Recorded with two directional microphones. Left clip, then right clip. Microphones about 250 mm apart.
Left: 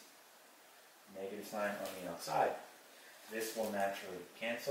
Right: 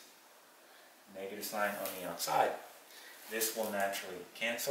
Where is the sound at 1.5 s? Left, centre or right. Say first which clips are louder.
Right 4 dB; centre.